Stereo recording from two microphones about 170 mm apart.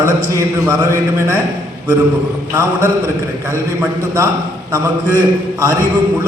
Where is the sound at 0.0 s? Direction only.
15° right (ahead or behind).